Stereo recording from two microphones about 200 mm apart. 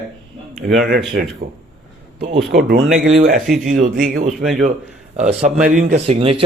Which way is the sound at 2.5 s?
55° right (ahead or behind).